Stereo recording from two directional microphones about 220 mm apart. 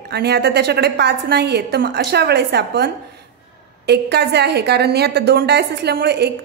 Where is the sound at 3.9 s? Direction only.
50° right (ahead or behind).